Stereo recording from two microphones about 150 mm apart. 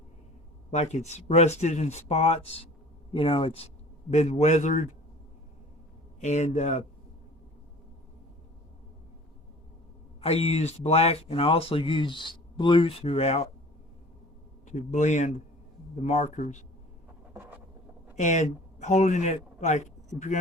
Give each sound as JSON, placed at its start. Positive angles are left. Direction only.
{"t": 0.7, "sound": "speech", "side_deg": 50}
{"t": 4.1, "sound": "speech", "side_deg": 50}
{"t": 6.1, "sound": "speech", "side_deg": 50}
{"t": 10.2, "sound": "speech", "side_deg": 40}
{"t": 14.7, "sound": "speech", "side_deg": 55}
{"t": 18.2, "sound": "speech", "side_deg": 55}